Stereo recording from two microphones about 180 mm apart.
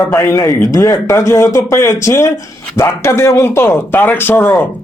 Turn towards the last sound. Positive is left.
turn(degrees=10)  # may be behind; listen again after turning